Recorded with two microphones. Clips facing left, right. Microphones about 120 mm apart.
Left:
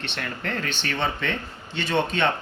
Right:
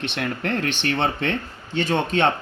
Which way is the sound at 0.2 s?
70° right (ahead or behind).